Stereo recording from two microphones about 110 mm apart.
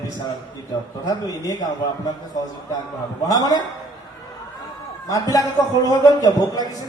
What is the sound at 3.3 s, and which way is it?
Speech, 35° left (ahead or behind).